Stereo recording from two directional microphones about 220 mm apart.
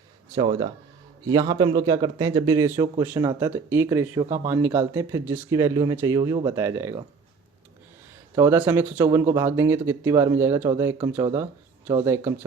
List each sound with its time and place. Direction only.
0.3 s a man's voice: 20° right (ahead or behind)
8.4 s speech: 10° right (ahead or behind)